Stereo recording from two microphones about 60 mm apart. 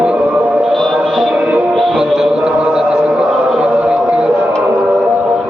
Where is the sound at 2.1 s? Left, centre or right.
Centre.